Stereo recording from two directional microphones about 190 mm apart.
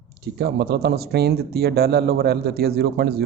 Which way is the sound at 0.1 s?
60° right (ahead or behind).